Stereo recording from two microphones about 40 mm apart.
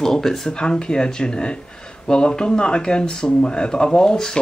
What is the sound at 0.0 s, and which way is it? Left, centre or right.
Speech, centre.